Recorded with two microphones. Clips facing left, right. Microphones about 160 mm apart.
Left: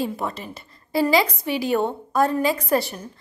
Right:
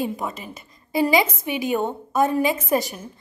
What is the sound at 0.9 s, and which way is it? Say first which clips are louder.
A woman's voice: even; 15° right (ahead or behind).